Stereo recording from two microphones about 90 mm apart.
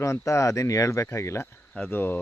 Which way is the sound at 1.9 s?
20° left (ahead or behind).